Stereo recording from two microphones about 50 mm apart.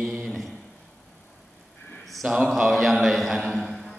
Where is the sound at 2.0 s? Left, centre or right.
Centre.